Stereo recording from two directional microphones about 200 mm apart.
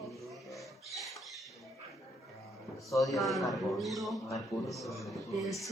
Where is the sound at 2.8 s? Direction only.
15° left (ahead or behind).